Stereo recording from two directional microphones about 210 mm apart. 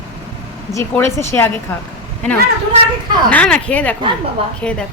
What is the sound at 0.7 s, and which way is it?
Speech, 10° left (ahead or behind).